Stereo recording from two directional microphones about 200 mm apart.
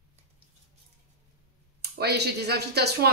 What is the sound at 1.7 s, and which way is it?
Speech, 55° right (ahead or behind).